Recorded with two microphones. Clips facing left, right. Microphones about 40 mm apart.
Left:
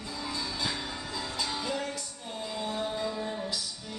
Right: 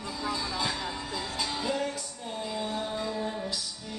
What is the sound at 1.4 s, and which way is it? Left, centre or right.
Music, centre.